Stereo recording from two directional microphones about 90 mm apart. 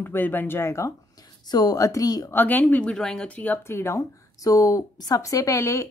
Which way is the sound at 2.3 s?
20° left (ahead or behind).